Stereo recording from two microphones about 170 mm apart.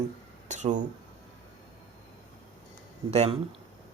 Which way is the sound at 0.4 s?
45° right (ahead or behind).